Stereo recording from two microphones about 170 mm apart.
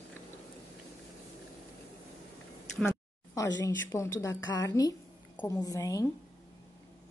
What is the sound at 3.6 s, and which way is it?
A woman's voice, 15° left (ahead or behind).